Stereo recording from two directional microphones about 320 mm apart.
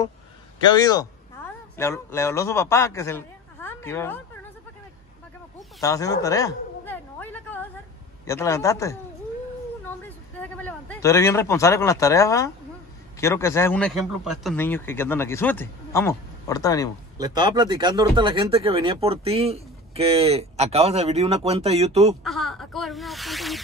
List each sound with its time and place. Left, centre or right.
0.7 s a man's voice: centre
5.8 s a sound: centre
8.3 s a man's voice: centre
9.8 s a sound: centre
13.2 s a man's voice: centre
17.2 s speech: centre
22.2 s speech: centre